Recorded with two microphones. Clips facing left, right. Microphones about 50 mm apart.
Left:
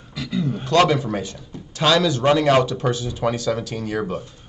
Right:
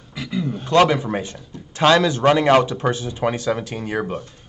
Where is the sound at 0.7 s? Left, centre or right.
Right.